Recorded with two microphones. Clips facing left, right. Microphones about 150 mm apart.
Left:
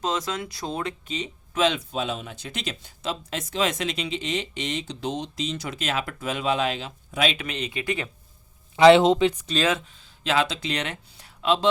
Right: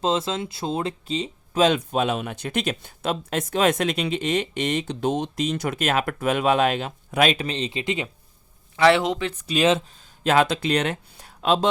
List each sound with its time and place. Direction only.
0.0 s speech: 25° right (ahead or behind); by 7.3 s 55° right (ahead or behind)
7.3 s speech: 30° right (ahead or behind)
8.7 s speech: 20° left (ahead or behind)
10.2 s speech: 55° right (ahead or behind)